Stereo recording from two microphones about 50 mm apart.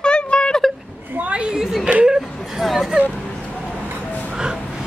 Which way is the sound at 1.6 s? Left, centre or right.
Centre.